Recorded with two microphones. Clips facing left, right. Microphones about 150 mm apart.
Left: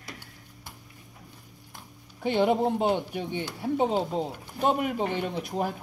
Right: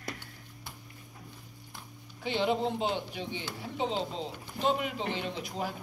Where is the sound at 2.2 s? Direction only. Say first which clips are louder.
Left 6 dB; 50° left (ahead or behind).